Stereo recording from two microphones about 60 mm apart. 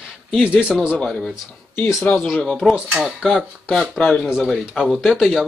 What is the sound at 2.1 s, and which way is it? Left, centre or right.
Speech, left.